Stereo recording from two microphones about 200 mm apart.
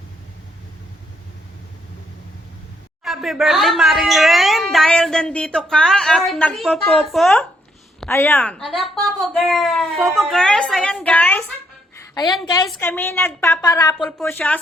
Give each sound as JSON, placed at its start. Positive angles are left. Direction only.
{"t": 3.0, "sound": "speech", "side_deg": 0}
{"t": 11.9, "sound": "a sound", "side_deg": 20}
{"t": 12.8, "sound": "a woman's voice", "side_deg": 10}
{"t": 14.0, "sound": "a woman's voice", "side_deg": 5}